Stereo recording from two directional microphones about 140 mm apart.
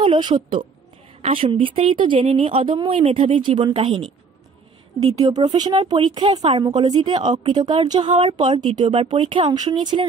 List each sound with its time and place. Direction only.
0.0 s speech: 35° right (ahead or behind)
5.3 s speech: 30° right (ahead or behind)